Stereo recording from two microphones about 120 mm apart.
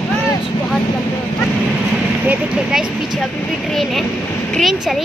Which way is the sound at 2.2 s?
10° right (ahead or behind).